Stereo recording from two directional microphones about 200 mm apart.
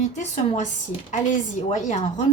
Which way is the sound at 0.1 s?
35° left (ahead or behind).